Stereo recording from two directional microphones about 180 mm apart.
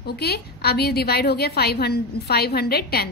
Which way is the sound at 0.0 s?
65° left (ahead or behind).